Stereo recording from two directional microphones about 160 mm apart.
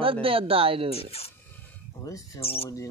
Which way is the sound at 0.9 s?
40° left (ahead or behind).